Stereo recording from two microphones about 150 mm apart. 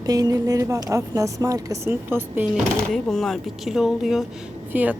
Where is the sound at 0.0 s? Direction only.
25° right (ahead or behind).